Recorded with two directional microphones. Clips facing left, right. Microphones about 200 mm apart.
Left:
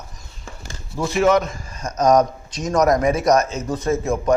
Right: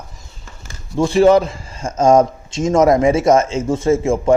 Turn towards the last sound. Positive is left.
turn(degrees=-25)  # may be behind; listen again after turning